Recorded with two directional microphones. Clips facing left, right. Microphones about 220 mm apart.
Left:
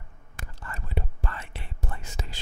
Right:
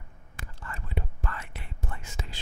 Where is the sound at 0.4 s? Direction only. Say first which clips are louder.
Left 1 dB; 40° left (ahead or behind).